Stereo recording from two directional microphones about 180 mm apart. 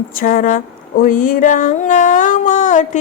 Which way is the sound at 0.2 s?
50° left (ahead or behind).